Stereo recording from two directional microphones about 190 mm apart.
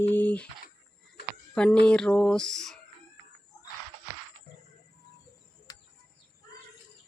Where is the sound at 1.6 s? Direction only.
5° left (ahead or behind).